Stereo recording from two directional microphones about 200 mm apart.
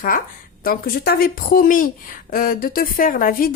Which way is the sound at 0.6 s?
45° left (ahead or behind).